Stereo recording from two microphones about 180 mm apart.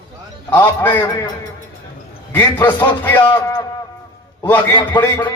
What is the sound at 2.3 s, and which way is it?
Speech, 15° left (ahead or behind).